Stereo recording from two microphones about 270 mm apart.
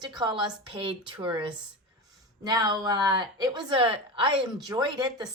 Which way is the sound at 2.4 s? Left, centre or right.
Centre.